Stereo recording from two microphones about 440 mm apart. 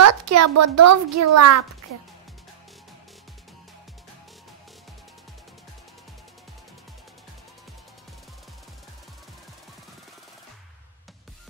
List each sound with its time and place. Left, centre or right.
0.0 s a child's voice: right